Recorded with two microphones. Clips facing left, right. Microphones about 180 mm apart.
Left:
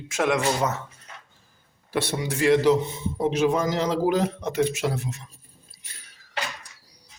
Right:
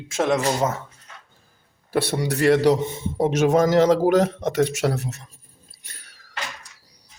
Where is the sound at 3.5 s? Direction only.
85° right.